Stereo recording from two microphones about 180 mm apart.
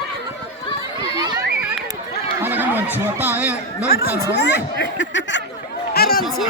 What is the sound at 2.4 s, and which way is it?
Snicker, 10° right (ahead or behind).